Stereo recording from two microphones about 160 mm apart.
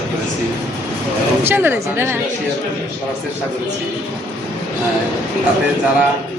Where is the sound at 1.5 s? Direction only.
15° right (ahead or behind).